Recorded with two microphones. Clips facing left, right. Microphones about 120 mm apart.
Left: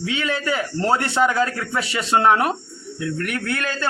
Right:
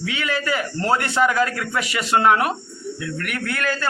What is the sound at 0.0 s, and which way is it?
A man's voice, 25° left (ahead or behind).